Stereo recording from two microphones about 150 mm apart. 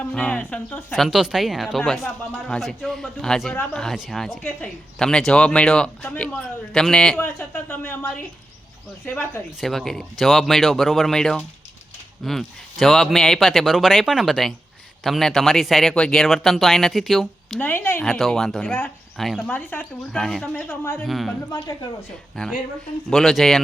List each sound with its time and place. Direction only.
0.0 s speech: 5° left (ahead or behind)
0.9 s speech: centre (ahead or behind)
9.6 s speech: centre (ahead or behind)
17.6 s speech: 10° left (ahead or behind)
21.1 s speech: centre (ahead or behind)
21.5 s speech: 25° left (ahead or behind)
22.4 s speech: 5° left (ahead or behind)